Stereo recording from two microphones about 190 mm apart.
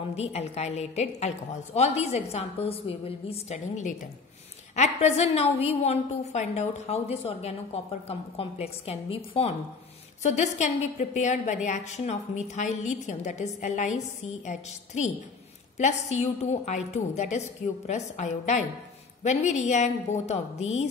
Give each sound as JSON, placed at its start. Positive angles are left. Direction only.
{"t": 0.1, "sound": "a woman's voice", "side_deg": 35}